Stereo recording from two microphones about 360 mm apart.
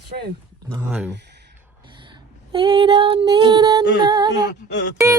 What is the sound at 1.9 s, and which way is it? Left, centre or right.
Female singing, centre.